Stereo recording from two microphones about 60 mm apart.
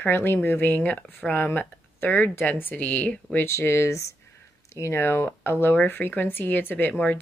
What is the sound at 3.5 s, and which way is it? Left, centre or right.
Speech, left.